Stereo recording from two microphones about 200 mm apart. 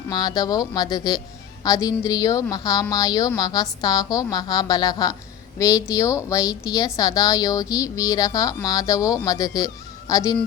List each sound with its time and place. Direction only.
0.1 s a woman's voice: 20° left (ahead or behind)